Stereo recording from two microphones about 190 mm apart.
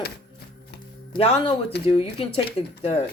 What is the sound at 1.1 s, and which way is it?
Speech, 30° left (ahead or behind).